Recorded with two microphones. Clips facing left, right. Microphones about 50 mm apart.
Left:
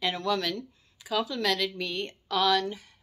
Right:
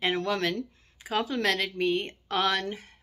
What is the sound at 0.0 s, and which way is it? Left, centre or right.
Speech, right.